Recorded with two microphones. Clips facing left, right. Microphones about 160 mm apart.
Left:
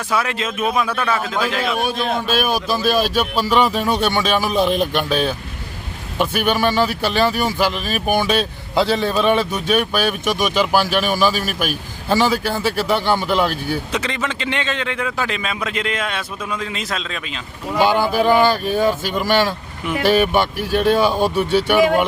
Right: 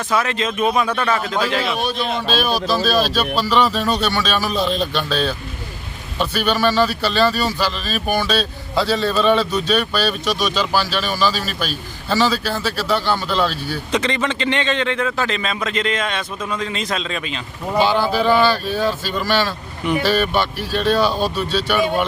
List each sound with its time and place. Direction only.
0.1 s a man's voice: 10° left (ahead or behind)
2.0 s speech: 50° left (ahead or behind)
2.4 s a man's voice: 15° left (ahead or behind)
17.7 s a man's voice: 15° left (ahead or behind)